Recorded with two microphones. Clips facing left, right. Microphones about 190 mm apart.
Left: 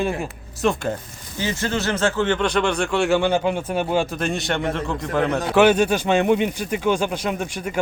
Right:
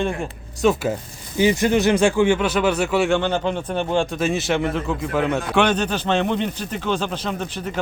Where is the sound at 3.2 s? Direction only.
10° left (ahead or behind).